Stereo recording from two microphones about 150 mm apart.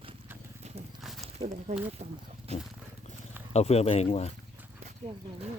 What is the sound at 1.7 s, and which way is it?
Speech, 50° right (ahead or behind).